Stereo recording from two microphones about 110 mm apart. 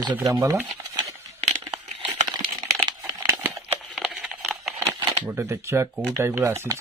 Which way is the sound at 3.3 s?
20° right (ahead or behind).